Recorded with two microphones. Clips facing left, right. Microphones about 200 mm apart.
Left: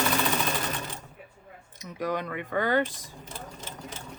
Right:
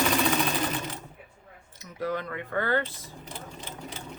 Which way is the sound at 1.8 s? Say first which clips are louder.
Left 1 dB; 15° left (ahead or behind).